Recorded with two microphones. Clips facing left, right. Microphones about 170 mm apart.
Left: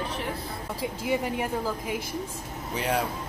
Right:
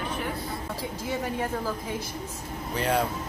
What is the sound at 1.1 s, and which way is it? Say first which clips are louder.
Speech: left 2 dB; 15° left (ahead or behind).